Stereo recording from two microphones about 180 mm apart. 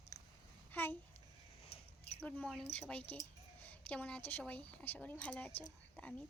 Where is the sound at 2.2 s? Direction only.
5° left (ahead or behind).